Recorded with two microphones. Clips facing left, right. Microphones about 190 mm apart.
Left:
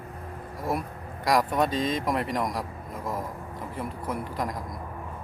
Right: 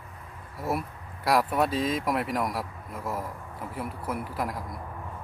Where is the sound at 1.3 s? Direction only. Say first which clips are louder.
Even; 5° right (ahead or behind).